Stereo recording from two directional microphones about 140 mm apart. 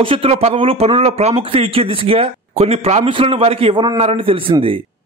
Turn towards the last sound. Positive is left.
turn(degrees=-40)  # may be behind; listen again after turning